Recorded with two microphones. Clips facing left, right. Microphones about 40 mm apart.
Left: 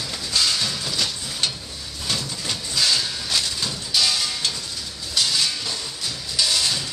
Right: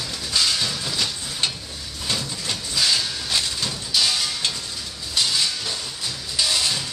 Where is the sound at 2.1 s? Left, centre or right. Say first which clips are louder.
Even; centre.